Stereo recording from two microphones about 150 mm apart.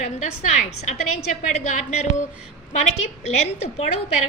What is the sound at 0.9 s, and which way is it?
A woman's voice, 55° left (ahead or behind).